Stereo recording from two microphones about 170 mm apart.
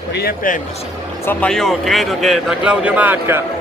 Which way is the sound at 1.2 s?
10° left (ahead or behind).